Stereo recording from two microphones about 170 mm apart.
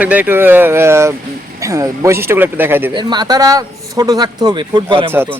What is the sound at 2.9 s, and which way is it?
A man's voice, 25° right (ahead or behind).